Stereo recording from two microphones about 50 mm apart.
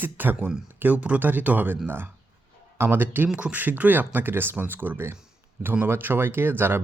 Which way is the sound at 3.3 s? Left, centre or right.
Centre.